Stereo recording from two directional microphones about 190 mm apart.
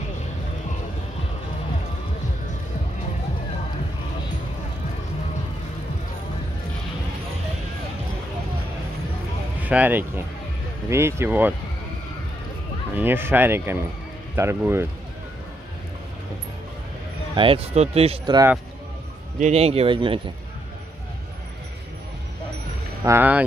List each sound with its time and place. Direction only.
9.7 s speech: 10° right (ahead or behind)
12.9 s speech: 10° right (ahead or behind)
17.4 s speech: 30° right (ahead or behind)
19.4 s speech: 35° right (ahead or behind)
23.0 s speech: 10° right (ahead or behind)